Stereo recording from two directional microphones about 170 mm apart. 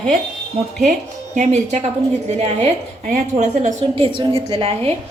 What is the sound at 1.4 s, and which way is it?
Speech, 45° right (ahead or behind).